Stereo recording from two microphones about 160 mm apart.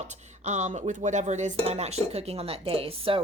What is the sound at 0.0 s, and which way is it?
A woman's voice, 45° right (ahead or behind).